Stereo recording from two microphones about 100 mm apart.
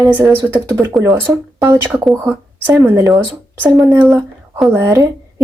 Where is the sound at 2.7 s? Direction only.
30° right (ahead or behind).